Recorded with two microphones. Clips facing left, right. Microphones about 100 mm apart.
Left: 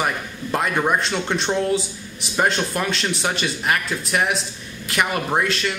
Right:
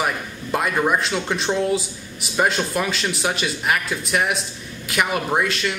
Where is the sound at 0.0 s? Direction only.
Centre (ahead or behind).